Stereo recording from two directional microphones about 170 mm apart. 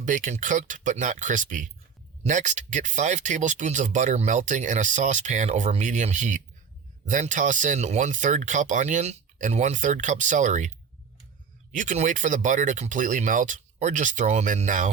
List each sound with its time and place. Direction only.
0.0 s speech: 50° right (ahead or behind)
11.7 s speech: 50° right (ahead or behind)